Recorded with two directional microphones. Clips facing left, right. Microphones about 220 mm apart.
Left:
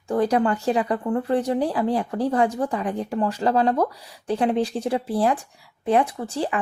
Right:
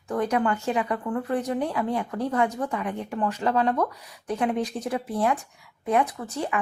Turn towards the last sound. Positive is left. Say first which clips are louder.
# left 4 dB
turn(degrees=30)  # may be behind; listen again after turning